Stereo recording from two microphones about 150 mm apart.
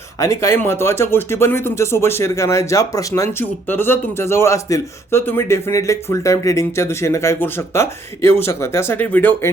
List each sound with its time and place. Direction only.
0.2 s speech: 20° left (ahead or behind)